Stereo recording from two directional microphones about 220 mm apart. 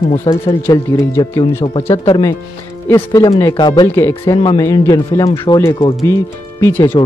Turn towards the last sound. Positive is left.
turn(degrees=15)  # may be behind; listen again after turning